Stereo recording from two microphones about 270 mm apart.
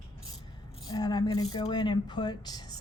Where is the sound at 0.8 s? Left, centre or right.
Centre.